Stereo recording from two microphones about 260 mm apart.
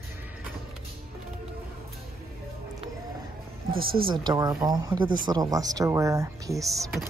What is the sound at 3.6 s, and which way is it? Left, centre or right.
Speech, right.